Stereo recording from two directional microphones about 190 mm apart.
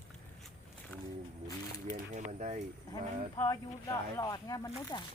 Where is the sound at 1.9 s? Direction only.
40° right (ahead or behind).